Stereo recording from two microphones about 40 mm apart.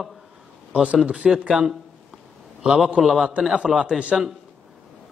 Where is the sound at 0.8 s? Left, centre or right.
Right.